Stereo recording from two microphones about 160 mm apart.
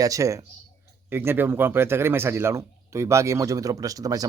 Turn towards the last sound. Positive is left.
turn(degrees=-20)  # may be behind; listen again after turning